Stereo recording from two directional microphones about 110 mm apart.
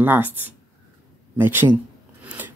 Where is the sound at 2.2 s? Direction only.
15° right (ahead or behind).